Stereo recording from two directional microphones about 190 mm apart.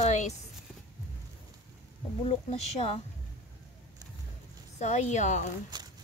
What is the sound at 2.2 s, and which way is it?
Speech, 35° left (ahead or behind).